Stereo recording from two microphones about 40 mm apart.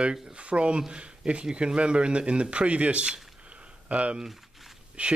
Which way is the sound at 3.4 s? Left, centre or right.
Right.